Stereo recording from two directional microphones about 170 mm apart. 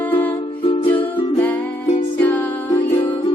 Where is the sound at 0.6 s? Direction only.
30° left (ahead or behind).